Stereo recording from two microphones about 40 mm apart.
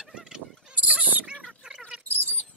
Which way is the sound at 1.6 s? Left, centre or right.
Right.